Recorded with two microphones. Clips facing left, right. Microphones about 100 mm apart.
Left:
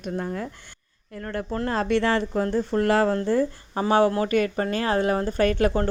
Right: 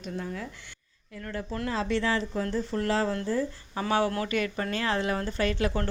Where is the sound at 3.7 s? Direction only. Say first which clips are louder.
Left 6 dB; 40° left (ahead or behind).